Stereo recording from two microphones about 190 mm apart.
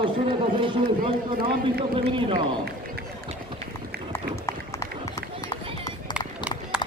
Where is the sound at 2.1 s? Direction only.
30° right (ahead or behind).